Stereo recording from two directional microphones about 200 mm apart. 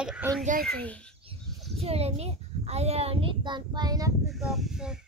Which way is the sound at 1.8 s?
30° right (ahead or behind).